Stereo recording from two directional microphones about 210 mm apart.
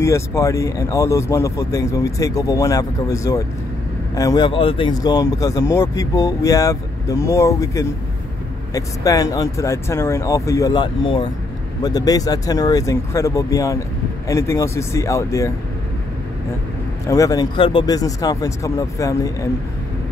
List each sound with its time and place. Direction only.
0.0 s speech: 15° left (ahead or behind)
17.1 s speech: 15° left (ahead or behind)